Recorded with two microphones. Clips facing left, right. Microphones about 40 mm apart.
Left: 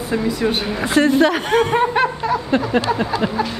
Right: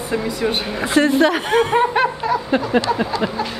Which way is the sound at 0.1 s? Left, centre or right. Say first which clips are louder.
Left 1 dB; centre.